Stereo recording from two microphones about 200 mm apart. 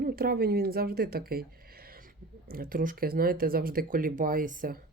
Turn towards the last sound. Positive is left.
turn(degrees=-45)  # may be behind; listen again after turning